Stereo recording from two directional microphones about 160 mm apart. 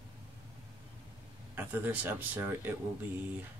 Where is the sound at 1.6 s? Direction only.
10° right (ahead or behind).